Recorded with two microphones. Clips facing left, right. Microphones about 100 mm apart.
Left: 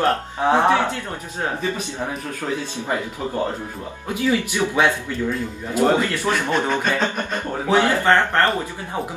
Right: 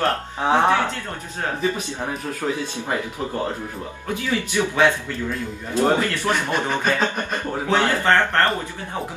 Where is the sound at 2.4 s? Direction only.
5° right (ahead or behind).